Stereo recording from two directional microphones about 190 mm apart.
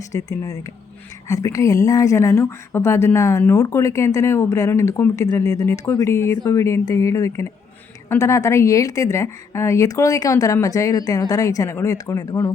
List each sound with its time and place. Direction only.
0.1 s speech: 15° left (ahead or behind)